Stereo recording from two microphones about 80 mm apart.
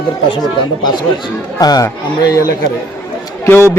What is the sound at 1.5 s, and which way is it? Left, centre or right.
Speech, left.